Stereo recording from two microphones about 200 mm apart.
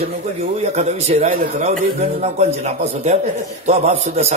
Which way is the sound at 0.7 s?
35° right (ahead or behind).